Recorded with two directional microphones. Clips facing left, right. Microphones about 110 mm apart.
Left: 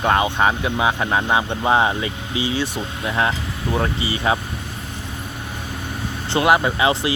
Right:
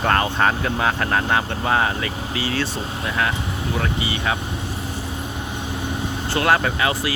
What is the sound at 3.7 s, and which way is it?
Speech, 30° left (ahead or behind).